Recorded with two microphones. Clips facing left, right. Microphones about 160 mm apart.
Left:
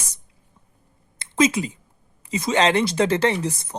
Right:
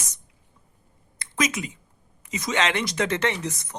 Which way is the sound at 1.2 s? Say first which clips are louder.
Left 7 dB; 25° left (ahead or behind).